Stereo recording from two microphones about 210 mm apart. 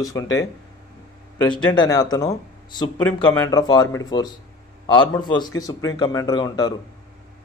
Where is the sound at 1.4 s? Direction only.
20° left (ahead or behind).